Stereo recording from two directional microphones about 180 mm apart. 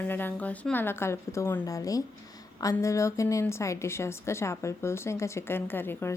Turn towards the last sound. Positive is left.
turn(degrees=10)  # may be behind; listen again after turning